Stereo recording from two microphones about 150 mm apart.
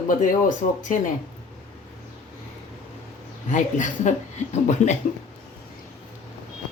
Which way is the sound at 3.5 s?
60° left (ahead or behind).